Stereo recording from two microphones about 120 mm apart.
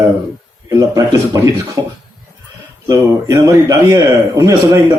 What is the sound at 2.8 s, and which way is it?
A man's voice, 25° right (ahead or behind).